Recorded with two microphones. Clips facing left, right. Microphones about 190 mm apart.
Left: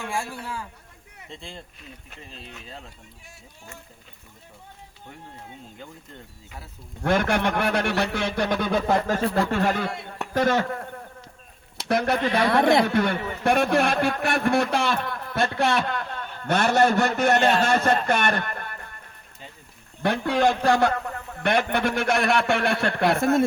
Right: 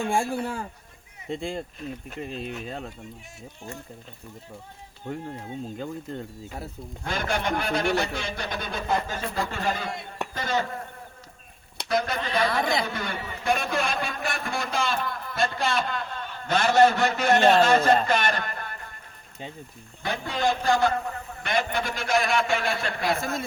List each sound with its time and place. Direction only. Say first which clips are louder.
0.0 s speech: right 6 dB; 50° right (ahead or behind)
7.0 s speech: left 6 dB; 65° left (ahead or behind)
11.9 s a man's voice: left 4 dB; 65° left (ahead or behind)
20.0 s speech: left 6 dB; 60° left (ahead or behind)